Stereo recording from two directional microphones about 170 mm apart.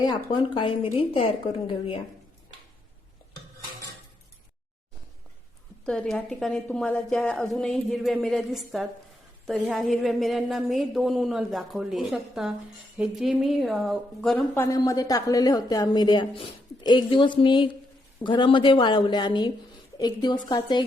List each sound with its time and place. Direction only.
0.0 s a woman's voice: 25° left (ahead or behind)
5.8 s a woman's voice: 5° left (ahead or behind); by 20.8 s 25° left (ahead or behind)